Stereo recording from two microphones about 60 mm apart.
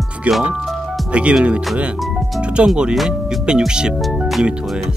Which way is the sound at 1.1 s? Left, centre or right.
Centre.